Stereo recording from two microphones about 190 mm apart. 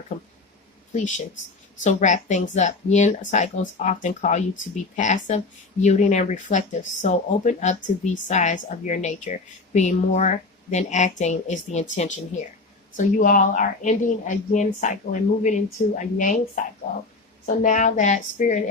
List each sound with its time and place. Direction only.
0.9 s a woman's voice: 40° left (ahead or behind)
17.4 s a woman's voice: 45° left (ahead or behind)